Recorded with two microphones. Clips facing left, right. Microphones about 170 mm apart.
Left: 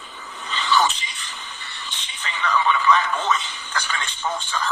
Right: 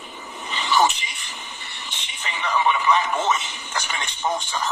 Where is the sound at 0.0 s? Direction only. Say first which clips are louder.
Right 2 dB; 15° right (ahead or behind).